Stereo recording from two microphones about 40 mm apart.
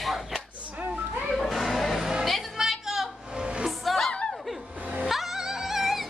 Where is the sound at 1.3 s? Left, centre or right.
Centre.